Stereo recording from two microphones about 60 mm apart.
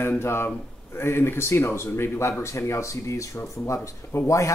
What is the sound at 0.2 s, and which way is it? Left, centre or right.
Speech, left.